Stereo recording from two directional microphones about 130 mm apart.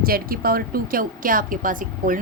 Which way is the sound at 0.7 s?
90° right.